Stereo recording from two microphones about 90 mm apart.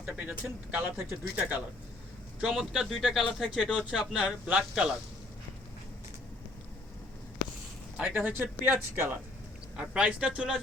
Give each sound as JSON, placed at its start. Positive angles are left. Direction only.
{"t": 0.0, "sound": "speech", "side_deg": -20}
{"t": 7.9, "sound": "speech", "side_deg": -20}
{"t": 9.7, "sound": "speech", "side_deg": -10}